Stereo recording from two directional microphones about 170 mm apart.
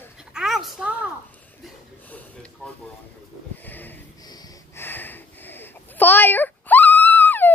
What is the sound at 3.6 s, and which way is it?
Sniff, 10° left (ahead or behind).